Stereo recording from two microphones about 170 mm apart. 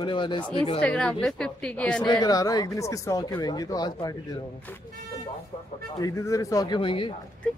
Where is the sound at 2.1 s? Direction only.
25° left (ahead or behind).